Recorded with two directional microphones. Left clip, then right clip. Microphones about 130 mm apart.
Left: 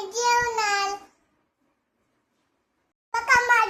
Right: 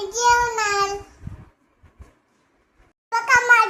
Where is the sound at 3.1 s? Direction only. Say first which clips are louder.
Right 4 dB; 5° right (ahead or behind).